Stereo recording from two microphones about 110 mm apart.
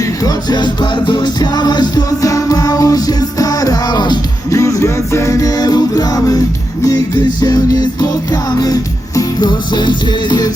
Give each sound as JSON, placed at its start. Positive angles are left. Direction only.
{"t": 0.3, "sound": "music", "side_deg": 40}
{"t": 4.5, "sound": "music", "side_deg": 30}
{"t": 7.4, "sound": "music", "side_deg": 35}